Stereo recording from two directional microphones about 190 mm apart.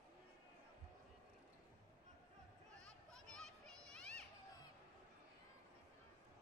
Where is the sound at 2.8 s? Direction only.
5° left (ahead or behind).